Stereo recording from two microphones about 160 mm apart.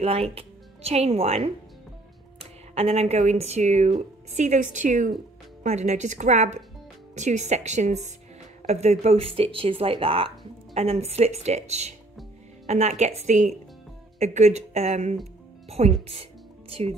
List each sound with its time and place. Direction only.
0.0 s speech: 40° right (ahead or behind)